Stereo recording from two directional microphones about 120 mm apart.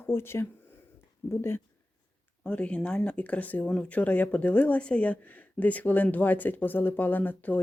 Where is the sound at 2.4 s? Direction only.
10° left (ahead or behind).